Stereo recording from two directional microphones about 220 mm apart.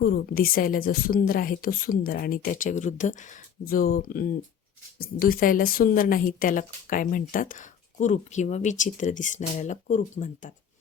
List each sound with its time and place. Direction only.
0.0 s a woman's voice: 40° left (ahead or behind)